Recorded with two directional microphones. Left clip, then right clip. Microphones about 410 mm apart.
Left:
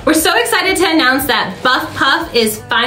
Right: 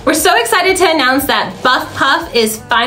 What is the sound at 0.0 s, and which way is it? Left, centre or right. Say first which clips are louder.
A woman's voice: right 1 dB; centre.